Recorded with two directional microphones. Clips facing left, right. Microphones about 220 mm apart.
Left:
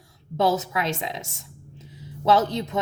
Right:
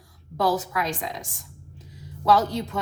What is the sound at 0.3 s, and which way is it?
A woman's voice, 25° left (ahead or behind).